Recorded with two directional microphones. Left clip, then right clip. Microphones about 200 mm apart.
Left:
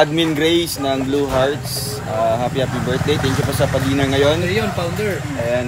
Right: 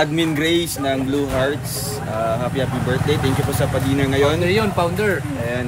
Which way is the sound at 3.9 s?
20° left (ahead or behind).